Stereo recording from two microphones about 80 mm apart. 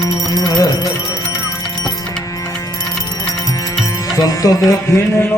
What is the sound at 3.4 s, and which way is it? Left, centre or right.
Music, left.